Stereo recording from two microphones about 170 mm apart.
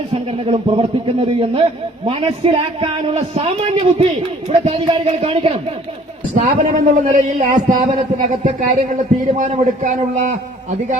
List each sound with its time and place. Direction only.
0.1 s a man's voice: 35° right (ahead or behind)
6.3 s a man's voice: 45° right (ahead or behind)